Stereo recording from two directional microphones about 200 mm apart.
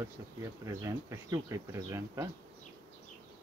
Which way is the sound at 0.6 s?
15° right (ahead or behind).